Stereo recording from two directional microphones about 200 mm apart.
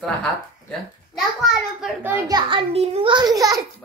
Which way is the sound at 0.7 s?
Centre (ahead or behind).